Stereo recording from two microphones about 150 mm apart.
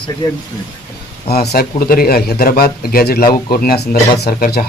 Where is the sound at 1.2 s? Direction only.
90° left.